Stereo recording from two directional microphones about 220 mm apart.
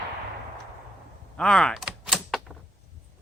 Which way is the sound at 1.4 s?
5° left (ahead or behind).